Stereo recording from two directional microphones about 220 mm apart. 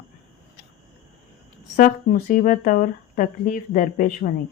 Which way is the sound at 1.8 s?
40° left (ahead or behind).